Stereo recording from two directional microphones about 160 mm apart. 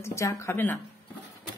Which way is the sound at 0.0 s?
20° left (ahead or behind).